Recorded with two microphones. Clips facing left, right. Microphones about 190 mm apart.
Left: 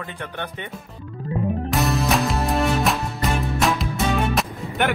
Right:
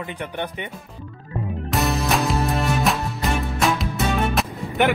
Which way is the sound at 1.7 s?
Centre (ahead or behind).